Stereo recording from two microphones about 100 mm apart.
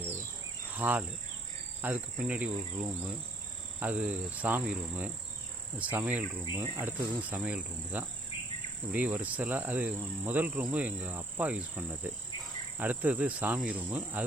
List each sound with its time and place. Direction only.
0.7 s speech: 20° right (ahead or behind)
6.5 s speech: 25° right (ahead or behind)
7.2 s speech: 15° right (ahead or behind)